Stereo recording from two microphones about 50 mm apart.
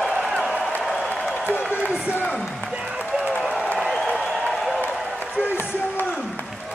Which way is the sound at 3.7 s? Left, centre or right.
Centre.